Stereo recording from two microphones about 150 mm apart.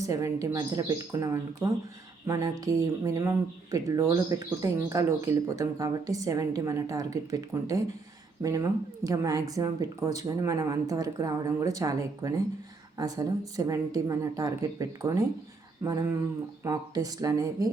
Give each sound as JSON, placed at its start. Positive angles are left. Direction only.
{"t": 0.0, "sound": "speech", "side_deg": -20}